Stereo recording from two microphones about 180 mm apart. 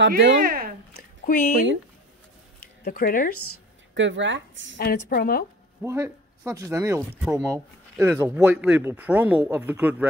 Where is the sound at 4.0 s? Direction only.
90° right.